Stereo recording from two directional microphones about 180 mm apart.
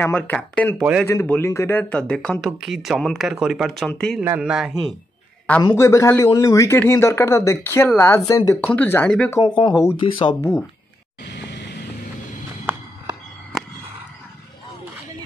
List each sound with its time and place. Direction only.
0.0 s a man's voice: 10° left (ahead or behind)
4.2 s speech: 10° right (ahead or behind)
5.6 s a man's voice: 20° left (ahead or behind)
9.6 s speech: 25° left (ahead or behind)
11.2 s music: 75° left (ahead or behind)